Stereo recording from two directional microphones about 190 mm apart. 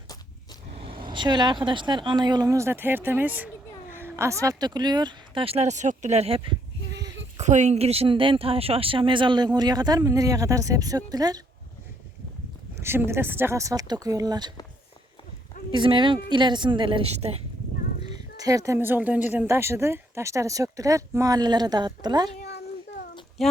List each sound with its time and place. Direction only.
0.7 s a woman's voice: 30° right (ahead or behind)
7.3 s a woman's voice: 40° right (ahead or behind); by 11.4 s 20° right (ahead or behind)
12.7 s speech: 15° right (ahead or behind)
15.7 s a woman's voice: 25° right (ahead or behind)
18.1 s speech: 20° right (ahead or behind)
23.4 s speech: centre (ahead or behind)